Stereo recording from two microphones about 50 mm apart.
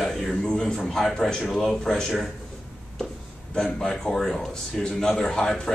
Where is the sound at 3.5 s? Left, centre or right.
Centre.